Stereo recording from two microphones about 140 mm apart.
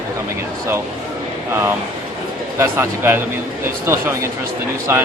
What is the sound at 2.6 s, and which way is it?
Speech, 15° right (ahead or behind).